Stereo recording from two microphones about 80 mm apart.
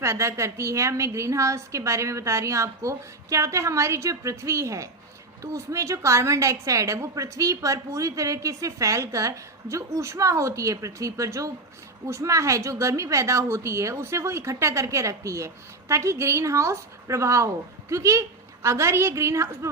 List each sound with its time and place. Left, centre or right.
0.0 s a woman's voice: right